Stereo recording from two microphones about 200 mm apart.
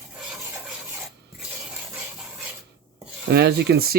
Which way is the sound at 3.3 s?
55° right (ahead or behind).